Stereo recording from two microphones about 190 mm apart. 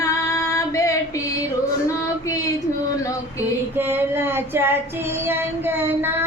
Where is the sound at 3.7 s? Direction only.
10° right (ahead or behind).